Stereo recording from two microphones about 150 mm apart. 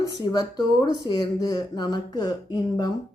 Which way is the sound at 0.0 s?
25° left (ahead or behind).